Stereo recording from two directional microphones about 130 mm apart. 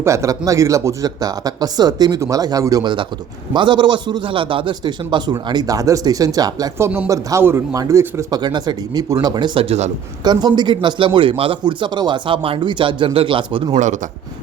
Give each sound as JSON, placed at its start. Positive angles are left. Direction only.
{"t": 0.0, "sound": "a man's voice", "side_deg": -25}
{"t": 10.2, "sound": "a man's voice", "side_deg": -35}